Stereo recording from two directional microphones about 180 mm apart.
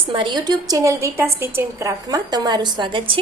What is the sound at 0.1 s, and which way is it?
A woman's voice, 25° right (ahead or behind).